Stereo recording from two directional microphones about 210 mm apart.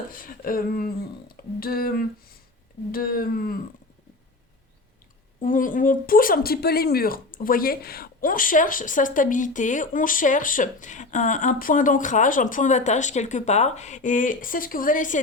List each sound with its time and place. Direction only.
0.1 s speech: 40° left (ahead or behind)
5.4 s speech: 40° left (ahead or behind)